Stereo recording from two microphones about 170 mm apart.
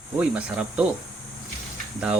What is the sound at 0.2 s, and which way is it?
Speech, 5° right (ahead or behind).